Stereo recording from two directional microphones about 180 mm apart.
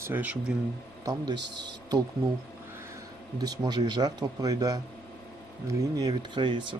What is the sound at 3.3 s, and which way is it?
Speech, 20° right (ahead or behind).